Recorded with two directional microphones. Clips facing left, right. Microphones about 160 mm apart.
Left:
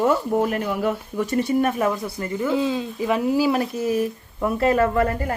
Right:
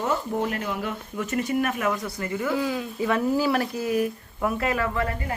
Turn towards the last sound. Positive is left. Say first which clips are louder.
# left 7 dB
turn(degrees=45)  # may be behind; listen again after turning